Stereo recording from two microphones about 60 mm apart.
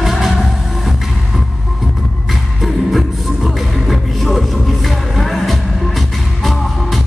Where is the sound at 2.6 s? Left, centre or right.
Centre.